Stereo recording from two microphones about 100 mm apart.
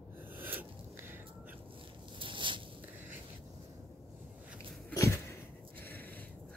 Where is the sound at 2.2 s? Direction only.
55° right (ahead or behind).